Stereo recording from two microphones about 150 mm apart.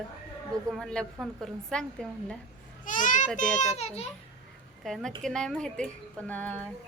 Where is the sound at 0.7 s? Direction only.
5° left (ahead or behind).